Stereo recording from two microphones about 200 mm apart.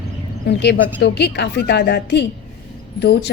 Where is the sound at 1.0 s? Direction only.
55° left (ahead or behind).